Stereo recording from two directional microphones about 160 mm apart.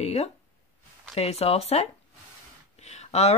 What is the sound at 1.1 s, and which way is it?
Speech, 40° left (ahead or behind).